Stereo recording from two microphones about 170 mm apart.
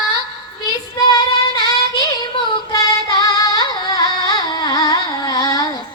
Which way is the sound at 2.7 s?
25° left (ahead or behind).